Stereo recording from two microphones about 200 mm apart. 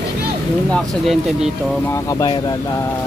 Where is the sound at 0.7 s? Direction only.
Centre (ahead or behind).